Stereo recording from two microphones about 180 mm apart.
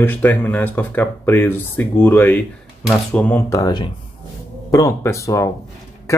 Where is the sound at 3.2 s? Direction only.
10° left (ahead or behind).